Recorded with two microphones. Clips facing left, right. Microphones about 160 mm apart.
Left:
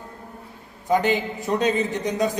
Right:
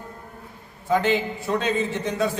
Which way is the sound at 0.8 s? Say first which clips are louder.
Left 1 dB; 20° left (ahead or behind).